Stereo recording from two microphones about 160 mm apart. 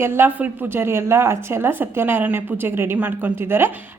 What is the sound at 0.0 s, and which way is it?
A woman's voice, 15° right (ahead or behind).